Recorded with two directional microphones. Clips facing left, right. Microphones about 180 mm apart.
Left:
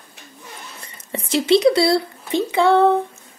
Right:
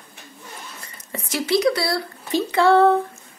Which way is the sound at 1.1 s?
25° left (ahead or behind).